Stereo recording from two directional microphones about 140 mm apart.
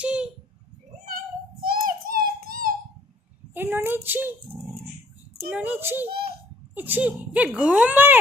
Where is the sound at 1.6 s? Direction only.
90° right.